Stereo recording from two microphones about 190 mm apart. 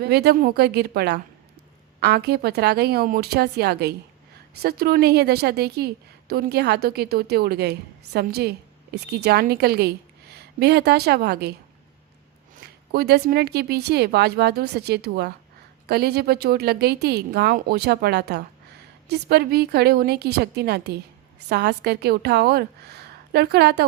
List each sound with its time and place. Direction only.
0.0 s a woman's voice: 60° right (ahead or behind)
12.9 s a woman's voice: 55° right (ahead or behind)